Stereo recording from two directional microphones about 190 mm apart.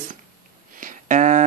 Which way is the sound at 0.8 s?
45° right (ahead or behind).